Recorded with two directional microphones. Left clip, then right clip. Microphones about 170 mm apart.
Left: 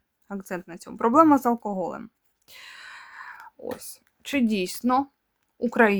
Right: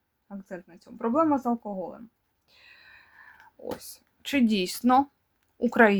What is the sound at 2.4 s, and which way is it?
Whispering, 35° left (ahead or behind).